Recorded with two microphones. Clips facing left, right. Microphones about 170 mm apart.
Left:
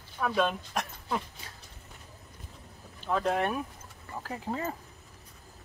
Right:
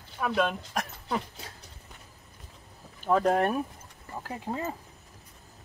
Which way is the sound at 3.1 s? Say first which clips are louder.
Right 4 dB; 40° right (ahead or behind).